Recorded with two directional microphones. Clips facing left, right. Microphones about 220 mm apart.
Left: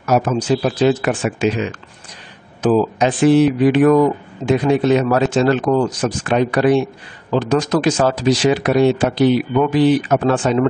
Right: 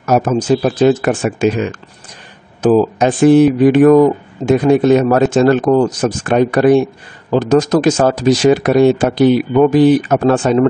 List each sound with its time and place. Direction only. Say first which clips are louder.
0.0 s speech: right 3 dB; 45° right (ahead or behind)